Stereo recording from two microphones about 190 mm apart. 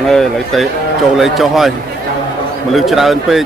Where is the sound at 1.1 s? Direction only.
Centre (ahead or behind).